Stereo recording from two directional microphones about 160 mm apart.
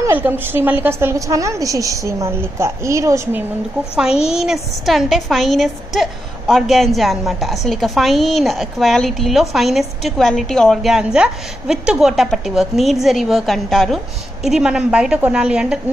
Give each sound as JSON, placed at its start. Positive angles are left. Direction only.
{"t": 0.0, "sound": "a woman's voice", "side_deg": -15}
{"t": 3.9, "sound": "a woman's voice", "side_deg": -5}